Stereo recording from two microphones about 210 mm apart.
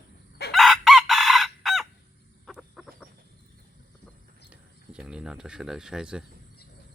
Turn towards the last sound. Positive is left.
turn(degrees=-5)  # may be behind; listen again after turning